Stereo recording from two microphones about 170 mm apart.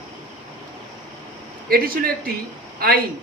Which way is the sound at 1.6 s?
60° right (ahead or behind).